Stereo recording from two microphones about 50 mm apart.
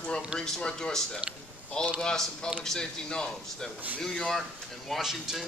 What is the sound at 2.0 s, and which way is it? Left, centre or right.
Speech, centre.